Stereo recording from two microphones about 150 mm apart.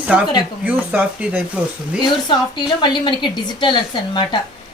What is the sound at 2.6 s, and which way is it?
A woman's voice, 30° left (ahead or behind).